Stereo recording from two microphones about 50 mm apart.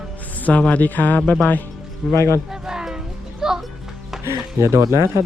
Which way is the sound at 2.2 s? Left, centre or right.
Left.